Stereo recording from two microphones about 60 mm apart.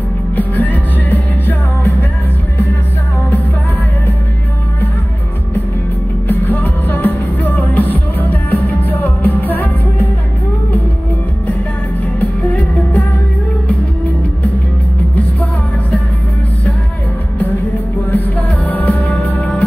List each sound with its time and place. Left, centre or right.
0.4 s music: left
6.2 s music: left
12.2 s music: left
18.1 s music: left